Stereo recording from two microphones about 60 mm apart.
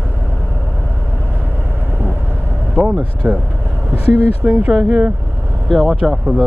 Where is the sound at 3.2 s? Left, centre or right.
Right.